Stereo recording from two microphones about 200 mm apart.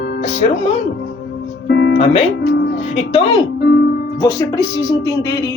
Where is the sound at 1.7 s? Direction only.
60° left (ahead or behind).